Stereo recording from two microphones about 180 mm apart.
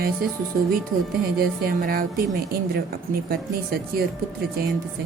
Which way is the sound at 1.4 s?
55° right (ahead or behind).